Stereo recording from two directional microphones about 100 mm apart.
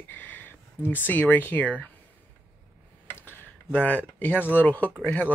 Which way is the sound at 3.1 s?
20° left (ahead or behind).